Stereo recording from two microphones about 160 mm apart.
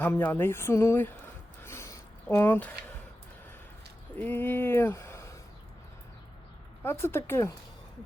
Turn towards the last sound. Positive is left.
turn(degrees=15)  # may be behind; listen again after turning